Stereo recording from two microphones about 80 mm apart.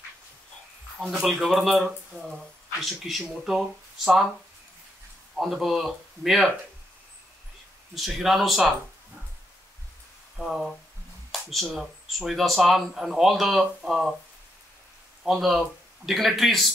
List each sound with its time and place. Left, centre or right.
1.2 s speech: centre
5.3 s speech: centre
7.9 s speech: centre
10.4 s speech: centre
15.2 s speech: centre